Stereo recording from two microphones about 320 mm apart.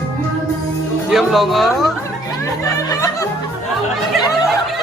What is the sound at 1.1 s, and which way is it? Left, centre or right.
Speech, centre.